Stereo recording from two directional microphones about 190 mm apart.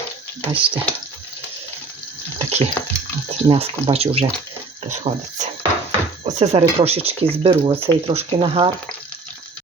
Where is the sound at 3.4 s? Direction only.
30° right (ahead or behind).